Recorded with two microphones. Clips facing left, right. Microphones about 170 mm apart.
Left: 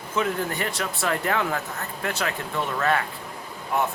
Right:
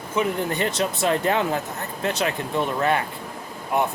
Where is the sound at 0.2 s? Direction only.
20° right (ahead or behind).